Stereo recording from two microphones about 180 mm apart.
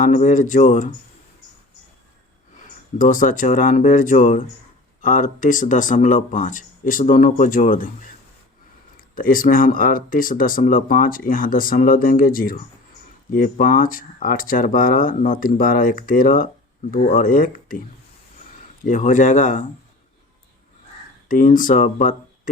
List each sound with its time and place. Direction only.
0.0 s speech: 45° left (ahead or behind)
3.0 s speech: 50° left (ahead or behind)
21.2 s speech: 45° left (ahead or behind)